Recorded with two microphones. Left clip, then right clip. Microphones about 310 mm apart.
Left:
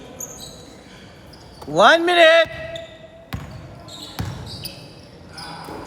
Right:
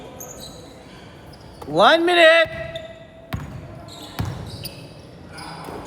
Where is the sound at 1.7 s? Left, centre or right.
Left.